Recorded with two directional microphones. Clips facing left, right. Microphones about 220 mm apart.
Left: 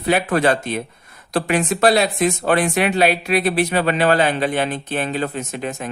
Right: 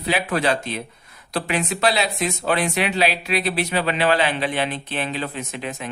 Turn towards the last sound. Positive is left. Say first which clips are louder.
# left 4 dB
turn(degrees=45)  # may be behind; listen again after turning